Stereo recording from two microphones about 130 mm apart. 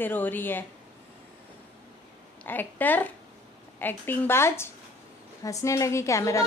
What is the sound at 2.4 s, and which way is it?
A woman's voice, 15° left (ahead or behind).